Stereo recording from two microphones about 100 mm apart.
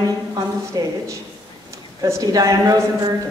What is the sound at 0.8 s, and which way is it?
Speech, 40° right (ahead or behind).